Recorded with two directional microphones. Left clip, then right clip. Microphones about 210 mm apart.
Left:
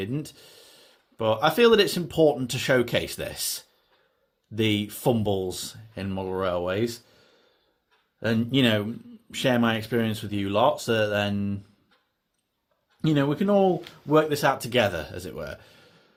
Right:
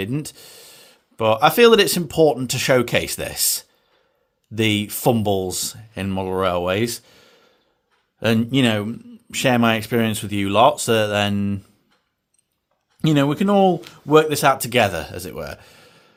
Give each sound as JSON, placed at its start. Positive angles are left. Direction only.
{"t": 0.0, "sound": "speech", "side_deg": -35}
{"t": 13.0, "sound": "speech", "side_deg": -35}